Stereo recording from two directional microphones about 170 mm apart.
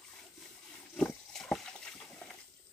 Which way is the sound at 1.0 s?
5° left (ahead or behind).